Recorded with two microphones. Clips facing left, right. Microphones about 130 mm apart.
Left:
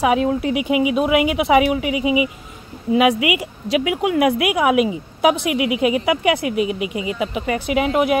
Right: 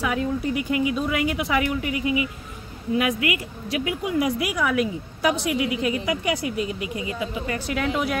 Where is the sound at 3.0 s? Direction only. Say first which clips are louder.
Left 8 dB; 90° left.